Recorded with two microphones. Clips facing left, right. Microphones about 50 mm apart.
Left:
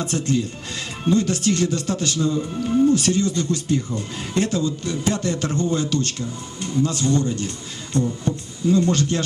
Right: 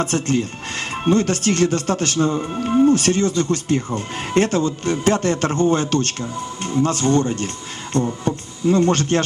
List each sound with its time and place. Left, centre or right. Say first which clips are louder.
0.0 s speech: right 3 dB; right